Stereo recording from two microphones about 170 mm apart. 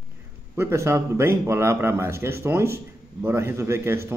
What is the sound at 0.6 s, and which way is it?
Speech, 15° right (ahead or behind).